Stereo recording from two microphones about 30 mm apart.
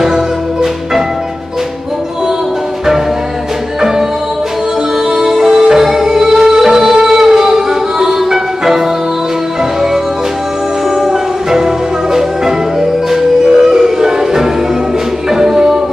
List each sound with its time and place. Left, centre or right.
0.0 s music: centre
5.1 s music: centre
11.0 s music: centre